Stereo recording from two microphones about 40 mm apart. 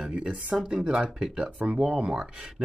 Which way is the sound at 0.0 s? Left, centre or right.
Right.